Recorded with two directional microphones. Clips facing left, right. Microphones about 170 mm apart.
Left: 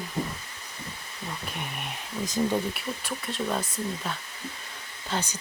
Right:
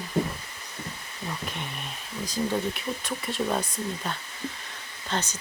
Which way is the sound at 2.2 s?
20° left (ahead or behind).